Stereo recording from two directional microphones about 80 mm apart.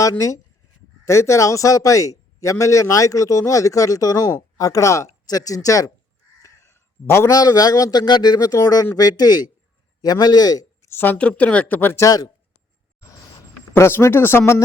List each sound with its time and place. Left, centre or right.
0.0 s speech: left
6.4 s a sound: left
7.3 s a man's voice: left
10.8 s speech: left
11.2 s speech: centre
11.9 s speech: left
13.7 s speech: left